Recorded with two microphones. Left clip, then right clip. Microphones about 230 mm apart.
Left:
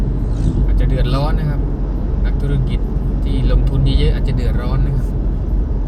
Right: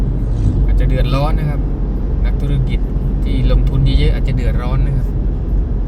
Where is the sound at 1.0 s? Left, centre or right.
Right.